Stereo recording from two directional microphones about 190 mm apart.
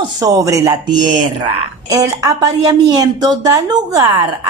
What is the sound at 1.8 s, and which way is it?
A woman's voice, 15° right (ahead or behind).